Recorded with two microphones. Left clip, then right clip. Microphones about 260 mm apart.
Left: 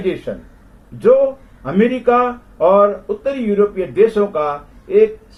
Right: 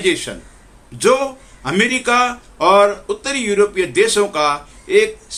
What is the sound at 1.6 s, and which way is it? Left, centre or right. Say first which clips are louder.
A man's voice: even; right.